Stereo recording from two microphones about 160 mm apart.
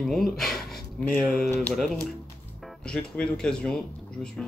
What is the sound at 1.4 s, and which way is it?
Speech, 15° left (ahead or behind).